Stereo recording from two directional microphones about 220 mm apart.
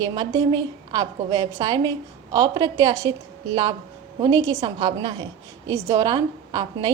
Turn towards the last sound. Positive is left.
turn(degrees=-20)  # may be behind; listen again after turning